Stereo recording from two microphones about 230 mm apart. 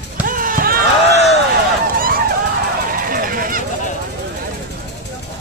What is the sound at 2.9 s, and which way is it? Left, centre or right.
Honk, right.